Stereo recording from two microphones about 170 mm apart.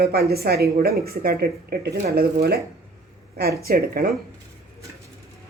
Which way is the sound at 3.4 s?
65° right (ahead or behind).